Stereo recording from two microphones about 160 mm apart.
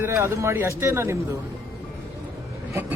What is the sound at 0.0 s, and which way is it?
A man's voice, 15° right (ahead or behind).